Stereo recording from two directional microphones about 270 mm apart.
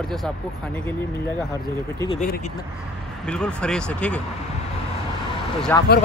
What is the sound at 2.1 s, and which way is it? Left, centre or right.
Speech, left.